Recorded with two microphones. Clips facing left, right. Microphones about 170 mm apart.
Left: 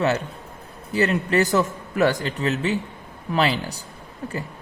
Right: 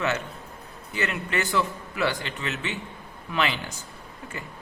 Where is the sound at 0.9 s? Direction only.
35° left (ahead or behind).